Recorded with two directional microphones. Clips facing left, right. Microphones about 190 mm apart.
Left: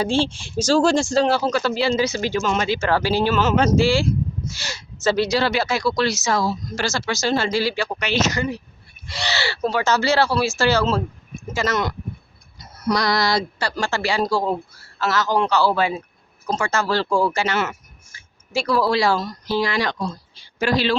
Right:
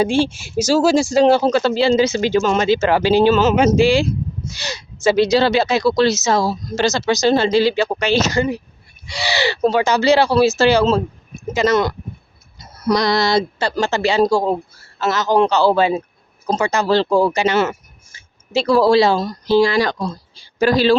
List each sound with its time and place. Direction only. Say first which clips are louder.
0.0 s speech: right 4 dB; 10° right (ahead or behind)
1.1 s speech: right 6 dB; 20° right (ahead or behind)
9.2 s speech: right 6 dB; 15° right (ahead or behind)
17.5 s speech: right 6 dB; 30° right (ahead or behind)